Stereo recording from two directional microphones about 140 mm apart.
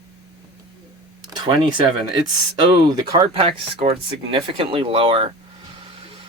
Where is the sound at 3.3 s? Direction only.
45° right (ahead or behind).